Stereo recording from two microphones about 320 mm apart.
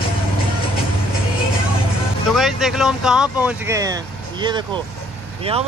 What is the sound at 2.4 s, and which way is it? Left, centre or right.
Speech, centre.